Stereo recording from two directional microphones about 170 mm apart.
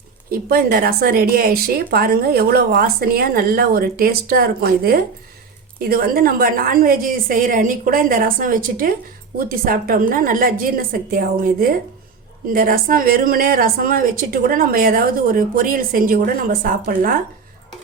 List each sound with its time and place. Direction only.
0.3 s speech: 60° right (ahead or behind)